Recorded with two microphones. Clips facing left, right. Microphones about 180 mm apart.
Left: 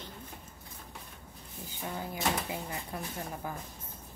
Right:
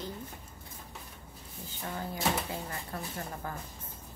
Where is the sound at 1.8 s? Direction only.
10° left (ahead or behind).